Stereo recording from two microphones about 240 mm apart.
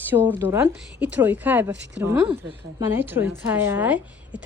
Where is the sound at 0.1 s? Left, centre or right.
Centre.